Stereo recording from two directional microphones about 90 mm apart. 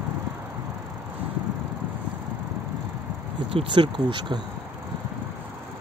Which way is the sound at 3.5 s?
75° right (ahead or behind).